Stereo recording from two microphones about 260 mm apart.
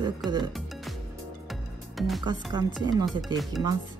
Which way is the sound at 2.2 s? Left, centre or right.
Centre.